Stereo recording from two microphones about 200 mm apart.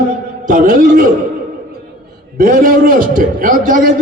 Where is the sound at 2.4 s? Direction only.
45° right (ahead or behind).